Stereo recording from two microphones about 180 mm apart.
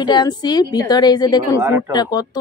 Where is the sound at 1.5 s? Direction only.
15° right (ahead or behind).